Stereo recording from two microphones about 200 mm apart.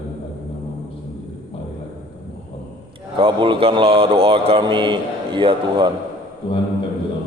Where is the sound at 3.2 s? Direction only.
25° right (ahead or behind).